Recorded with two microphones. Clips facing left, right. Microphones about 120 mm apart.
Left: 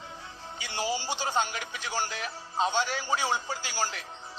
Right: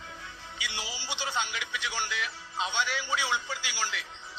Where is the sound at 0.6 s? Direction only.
45° left (ahead or behind).